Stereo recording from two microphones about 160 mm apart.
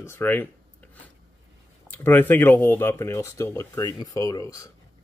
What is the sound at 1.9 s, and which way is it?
Speech, 10° left (ahead or behind).